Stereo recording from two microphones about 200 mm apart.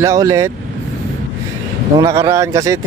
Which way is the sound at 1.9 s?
15° right (ahead or behind).